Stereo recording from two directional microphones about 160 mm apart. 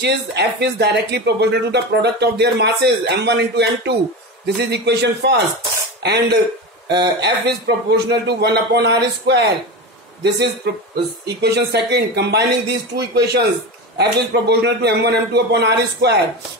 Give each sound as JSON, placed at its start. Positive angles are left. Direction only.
{"t": 0.0, "sound": "speech", "side_deg": -90}